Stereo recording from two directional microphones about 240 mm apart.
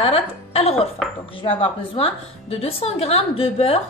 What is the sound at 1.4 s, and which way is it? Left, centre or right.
Speech, left.